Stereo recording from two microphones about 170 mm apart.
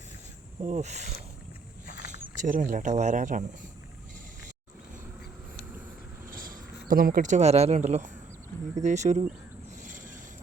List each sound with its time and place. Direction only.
0.6 s speech: 45° right (ahead or behind)
2.4 s speech: 50° right (ahead or behind)
6.2 s cricket: 55° right (ahead or behind)
6.8 s speech: 55° right (ahead or behind)
9.8 s boat: 50° right (ahead or behind)